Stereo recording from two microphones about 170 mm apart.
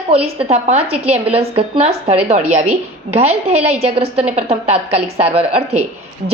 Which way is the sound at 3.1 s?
35° right (ahead or behind).